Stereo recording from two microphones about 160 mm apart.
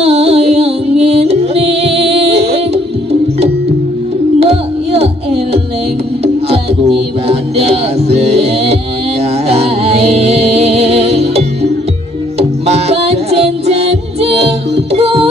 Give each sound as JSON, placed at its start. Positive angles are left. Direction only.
{"t": 0.0, "sound": "music", "side_deg": -40}